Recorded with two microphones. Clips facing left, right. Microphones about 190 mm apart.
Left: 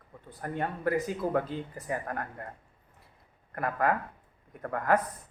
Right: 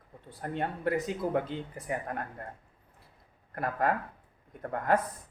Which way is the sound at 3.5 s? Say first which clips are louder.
Left 1 dB; 30° right (ahead or behind).